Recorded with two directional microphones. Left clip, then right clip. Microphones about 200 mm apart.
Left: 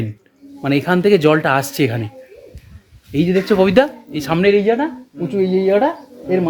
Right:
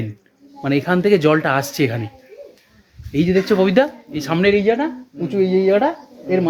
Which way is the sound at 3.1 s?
10° left (ahead or behind).